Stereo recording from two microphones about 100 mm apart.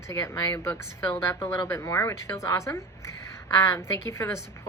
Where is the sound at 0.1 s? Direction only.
30° left (ahead or behind).